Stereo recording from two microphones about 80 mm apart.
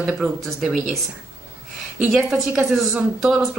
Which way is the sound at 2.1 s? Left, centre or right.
Centre.